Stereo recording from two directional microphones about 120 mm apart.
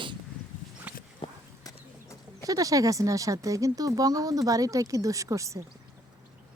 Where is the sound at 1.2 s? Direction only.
45° left (ahead or behind).